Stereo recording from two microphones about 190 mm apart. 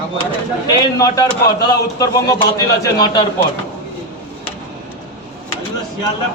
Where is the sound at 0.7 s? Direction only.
20° left (ahead or behind).